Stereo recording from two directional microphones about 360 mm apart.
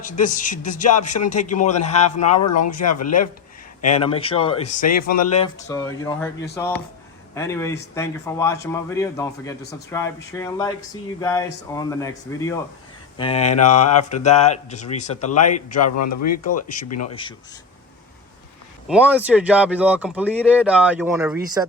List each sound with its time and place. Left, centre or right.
0.0 s speech: left
2.3 s speech: left
3.9 s speech: centre
4.8 s speech: left
5.2 s speech: centre
7.3 s speech: centre
15.3 s speech: left
17.1 s speech: centre
18.9 s speech: centre